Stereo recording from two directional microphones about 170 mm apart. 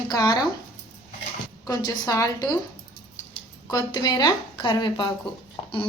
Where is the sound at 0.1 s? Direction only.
25° left (ahead or behind).